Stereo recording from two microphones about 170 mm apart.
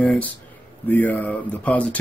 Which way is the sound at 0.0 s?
10° left (ahead or behind).